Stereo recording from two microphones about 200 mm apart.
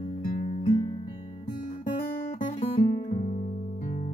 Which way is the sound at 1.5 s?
40° left (ahead or behind).